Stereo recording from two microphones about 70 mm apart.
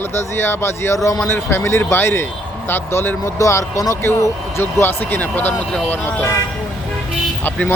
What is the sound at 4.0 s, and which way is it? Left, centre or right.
Speech, left.